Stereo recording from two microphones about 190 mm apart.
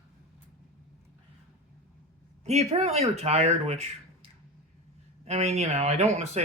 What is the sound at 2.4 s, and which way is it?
Speech, 35° right (ahead or behind).